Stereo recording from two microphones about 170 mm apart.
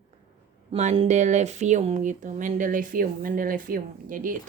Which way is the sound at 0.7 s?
35° right (ahead or behind).